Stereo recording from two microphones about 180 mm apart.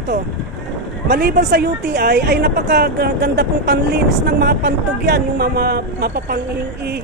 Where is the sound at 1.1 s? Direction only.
65° right (ahead or behind).